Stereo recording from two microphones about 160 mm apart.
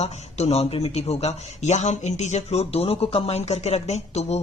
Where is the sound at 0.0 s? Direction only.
40° left (ahead or behind).